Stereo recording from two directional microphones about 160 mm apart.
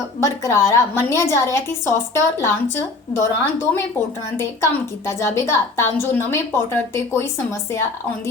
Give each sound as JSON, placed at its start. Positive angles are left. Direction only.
{"t": 0.2, "sound": "a woman's voice", "side_deg": 20}